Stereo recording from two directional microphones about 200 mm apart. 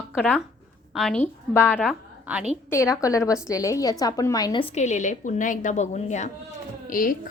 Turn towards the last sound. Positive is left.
turn(degrees=45)  # may be behind; listen again after turning